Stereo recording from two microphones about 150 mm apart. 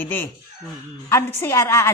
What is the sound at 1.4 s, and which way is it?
Speech, 20° left (ahead or behind).